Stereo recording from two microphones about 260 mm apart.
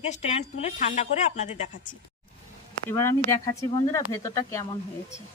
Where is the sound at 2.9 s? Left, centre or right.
Centre.